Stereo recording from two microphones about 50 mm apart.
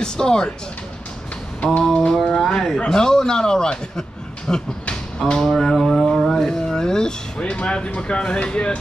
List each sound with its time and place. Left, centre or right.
0.0 s a man's voice: centre
1.6 s a sound: left
2.5 s a man's voice: centre
5.4 s music: centre
6.1 s speech: centre